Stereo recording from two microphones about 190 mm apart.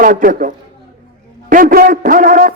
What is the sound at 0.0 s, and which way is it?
A man's voice, 45° right (ahead or behind).